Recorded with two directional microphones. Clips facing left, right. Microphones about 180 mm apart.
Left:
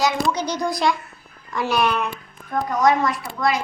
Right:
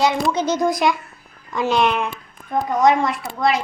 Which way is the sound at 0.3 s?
20° right (ahead or behind).